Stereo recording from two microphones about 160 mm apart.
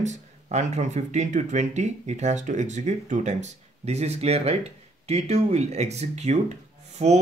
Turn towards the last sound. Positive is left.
turn(degrees=-45)  # may be behind; listen again after turning